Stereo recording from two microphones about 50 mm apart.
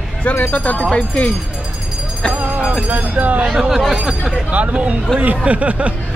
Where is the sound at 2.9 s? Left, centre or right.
Right.